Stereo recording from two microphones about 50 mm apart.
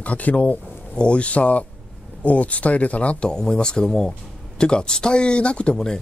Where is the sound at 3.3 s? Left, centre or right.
Centre.